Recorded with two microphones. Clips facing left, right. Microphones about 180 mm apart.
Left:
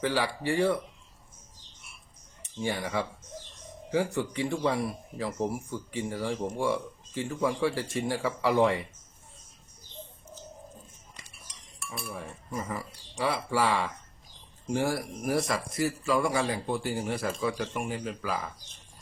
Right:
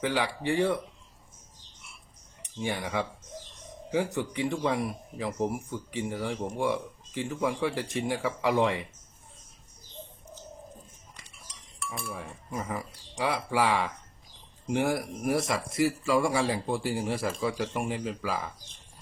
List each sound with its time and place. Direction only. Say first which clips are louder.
0.0 s speech: even; 15° right (ahead or behind)
2.6 s speech: even; 15° right (ahead or behind)
12.1 s speech: even; 15° right (ahead or behind)